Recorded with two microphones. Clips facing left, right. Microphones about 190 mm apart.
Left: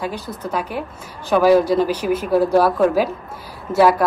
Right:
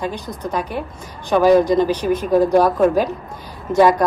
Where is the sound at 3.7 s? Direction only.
5° left (ahead or behind).